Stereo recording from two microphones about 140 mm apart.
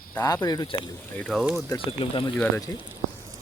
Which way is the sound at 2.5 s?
25° left (ahead or behind).